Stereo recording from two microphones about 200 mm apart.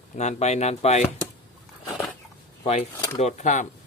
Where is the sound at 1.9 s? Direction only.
10° left (ahead or behind).